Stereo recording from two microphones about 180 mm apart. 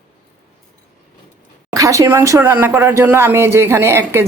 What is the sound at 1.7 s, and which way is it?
A woman's voice, 20° right (ahead or behind).